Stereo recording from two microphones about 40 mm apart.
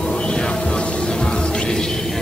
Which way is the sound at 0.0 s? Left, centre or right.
Left.